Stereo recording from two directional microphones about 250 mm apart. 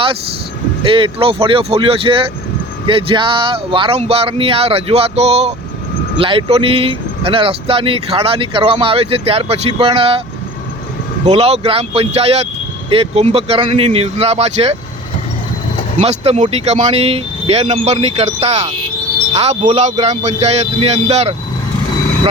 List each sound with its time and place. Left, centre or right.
0.9 s speech: right
11.3 s speech: right
16.0 s speech: right